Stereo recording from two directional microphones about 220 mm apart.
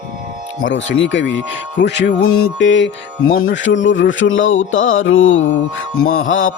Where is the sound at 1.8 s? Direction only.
50° left (ahead or behind).